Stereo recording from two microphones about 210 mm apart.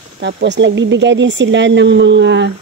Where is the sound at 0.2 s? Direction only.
55° right (ahead or behind).